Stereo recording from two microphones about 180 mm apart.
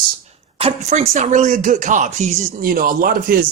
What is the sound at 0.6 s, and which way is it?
Speech, 40° right (ahead or behind).